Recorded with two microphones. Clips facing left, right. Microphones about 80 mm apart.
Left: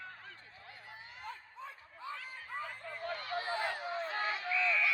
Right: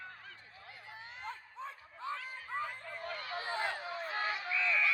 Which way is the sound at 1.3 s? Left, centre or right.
Right.